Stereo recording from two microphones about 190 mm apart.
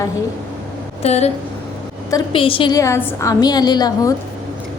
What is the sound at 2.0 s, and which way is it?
A woman's voice, 25° left (ahead or behind).